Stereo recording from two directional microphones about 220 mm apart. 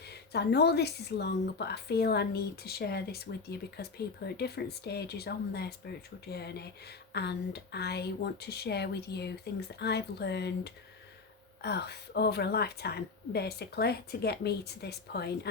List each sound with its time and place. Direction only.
0.1 s speech: 50° left (ahead or behind)